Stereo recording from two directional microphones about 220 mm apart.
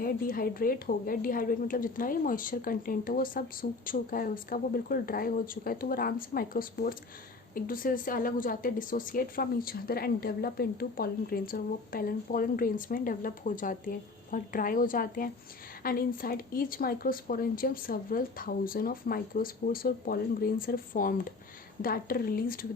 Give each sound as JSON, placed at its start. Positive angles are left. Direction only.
{"t": 0.0, "sound": "a woman's voice", "side_deg": 40}